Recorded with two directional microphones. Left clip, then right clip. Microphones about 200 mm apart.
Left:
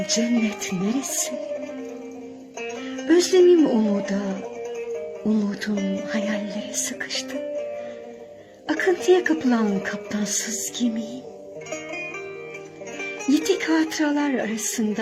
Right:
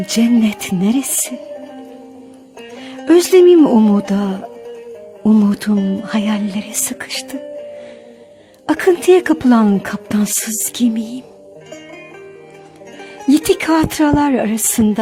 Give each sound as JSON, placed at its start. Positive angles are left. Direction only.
{"t": 0.1, "sound": "a woman's voice", "side_deg": -55}
{"t": 3.1, "sound": "speech", "side_deg": -50}
{"t": 5.3, "sound": "a woman's voice", "side_deg": -55}
{"t": 8.6, "sound": "a woman's voice", "side_deg": -55}
{"t": 13.4, "sound": "speech", "side_deg": -55}